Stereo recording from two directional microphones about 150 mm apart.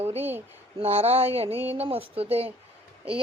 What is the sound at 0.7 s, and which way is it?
Speech, 45° right (ahead or behind).